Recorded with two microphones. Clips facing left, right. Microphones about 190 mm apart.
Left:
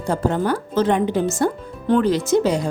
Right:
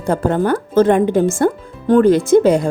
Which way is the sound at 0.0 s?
55° right (ahead or behind).